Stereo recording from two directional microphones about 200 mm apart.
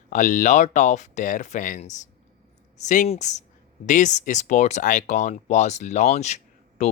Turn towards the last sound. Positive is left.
turn(degrees=35)  # may be behind; listen again after turning